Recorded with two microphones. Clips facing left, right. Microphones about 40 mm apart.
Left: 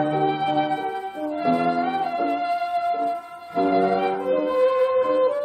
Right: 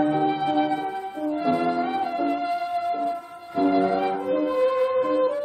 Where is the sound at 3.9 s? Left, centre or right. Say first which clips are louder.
Left 2 dB; centre.